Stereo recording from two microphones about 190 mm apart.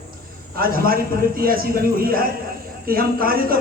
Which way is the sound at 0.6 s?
50° right (ahead or behind).